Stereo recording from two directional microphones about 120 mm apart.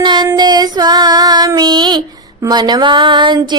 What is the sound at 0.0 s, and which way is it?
Child singing, 40° right (ahead or behind).